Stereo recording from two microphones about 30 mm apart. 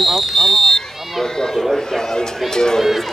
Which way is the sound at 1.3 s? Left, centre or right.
Centre.